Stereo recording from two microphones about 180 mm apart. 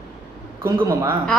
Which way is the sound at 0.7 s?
20° right (ahead or behind).